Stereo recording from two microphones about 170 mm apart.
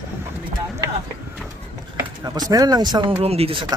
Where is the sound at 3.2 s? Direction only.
35° right (ahead or behind).